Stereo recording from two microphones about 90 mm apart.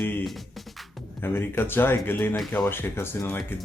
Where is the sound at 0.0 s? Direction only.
20° left (ahead or behind).